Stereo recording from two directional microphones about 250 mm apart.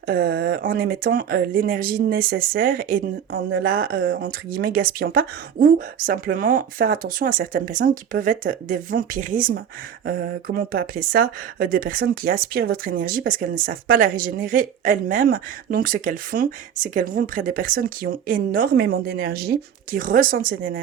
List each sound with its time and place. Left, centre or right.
0.1 s speech: right